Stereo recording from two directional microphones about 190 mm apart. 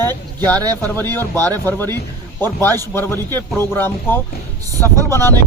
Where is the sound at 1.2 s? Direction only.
10° left (ahead or behind).